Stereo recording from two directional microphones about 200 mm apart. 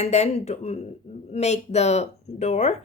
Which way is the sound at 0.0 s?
35° left (ahead or behind).